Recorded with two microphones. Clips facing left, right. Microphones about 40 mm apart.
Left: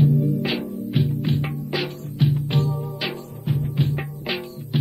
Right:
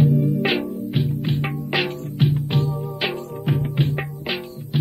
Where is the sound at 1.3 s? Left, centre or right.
Right.